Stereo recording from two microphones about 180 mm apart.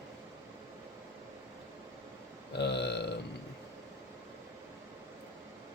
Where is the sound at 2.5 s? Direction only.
70° left (ahead or behind).